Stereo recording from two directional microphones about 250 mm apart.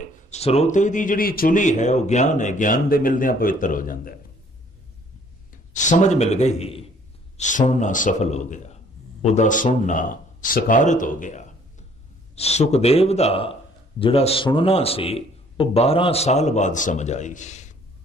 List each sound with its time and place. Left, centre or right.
0.0 s speech: left
5.7 s a man's voice: left